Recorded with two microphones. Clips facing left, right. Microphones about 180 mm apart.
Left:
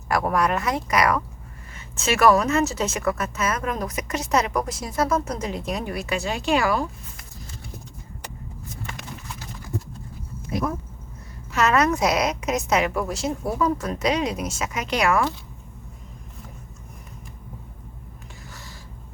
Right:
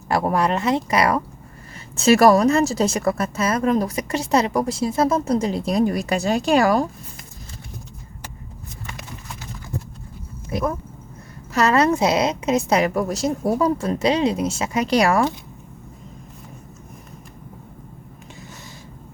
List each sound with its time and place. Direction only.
0.1 s a woman's voice: 25° right (ahead or behind)
11.5 s a woman's voice: 35° right (ahead or behind)